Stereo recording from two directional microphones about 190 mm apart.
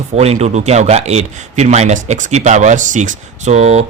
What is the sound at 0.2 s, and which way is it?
Speech, 35° right (ahead or behind).